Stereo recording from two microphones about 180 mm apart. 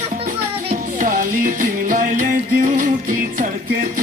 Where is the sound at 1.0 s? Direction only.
50° right (ahead or behind).